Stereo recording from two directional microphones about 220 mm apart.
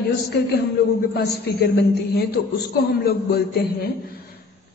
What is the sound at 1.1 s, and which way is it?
A woman's voice, 45° left (ahead or behind).